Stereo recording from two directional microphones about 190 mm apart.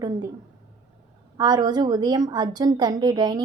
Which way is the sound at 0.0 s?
20° right (ahead or behind).